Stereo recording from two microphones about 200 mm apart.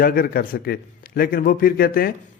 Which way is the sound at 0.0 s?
50° left (ahead or behind).